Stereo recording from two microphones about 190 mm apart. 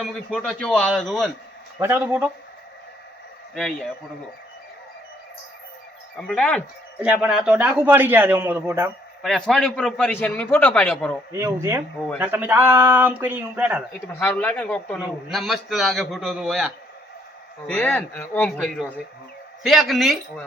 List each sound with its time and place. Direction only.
0.0 s a man's voice: centre (ahead or behind)
1.8 s a man's voice: 10° right (ahead or behind)
3.5 s a man's voice: 5° left (ahead or behind)
6.1 s a man's voice: 5° left (ahead or behind); by 8.9 s 15° right (ahead or behind)
9.2 s a man's voice: centre (ahead or behind)
11.3 s a man's voice: 15° right (ahead or behind)
14.1 s a man's voice: 10° left (ahead or behind)